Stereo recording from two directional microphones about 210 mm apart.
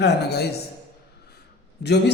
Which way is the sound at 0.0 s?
50° left (ahead or behind).